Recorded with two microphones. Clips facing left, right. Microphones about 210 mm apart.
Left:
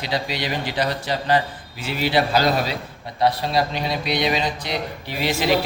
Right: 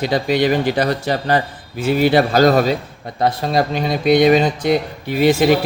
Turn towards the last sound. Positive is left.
turn(degrees=-50)  # may be behind; listen again after turning